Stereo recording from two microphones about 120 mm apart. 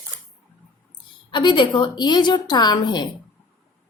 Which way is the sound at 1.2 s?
40° left (ahead or behind).